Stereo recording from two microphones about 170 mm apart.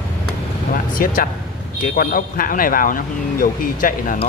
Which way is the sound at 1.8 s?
60° left (ahead or behind).